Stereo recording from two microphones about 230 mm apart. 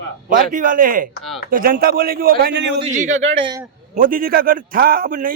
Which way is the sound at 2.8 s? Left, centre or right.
Right.